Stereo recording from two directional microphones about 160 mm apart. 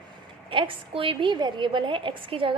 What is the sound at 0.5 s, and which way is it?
A woman's voice, 35° right (ahead or behind).